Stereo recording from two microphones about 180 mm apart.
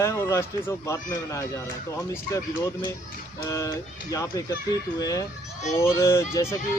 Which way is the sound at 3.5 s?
15° left (ahead or behind).